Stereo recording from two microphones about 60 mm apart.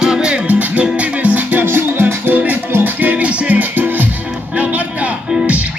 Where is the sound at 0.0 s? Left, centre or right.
Centre.